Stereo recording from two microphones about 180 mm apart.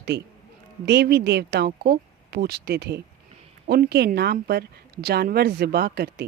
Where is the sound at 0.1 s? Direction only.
70° right (ahead or behind).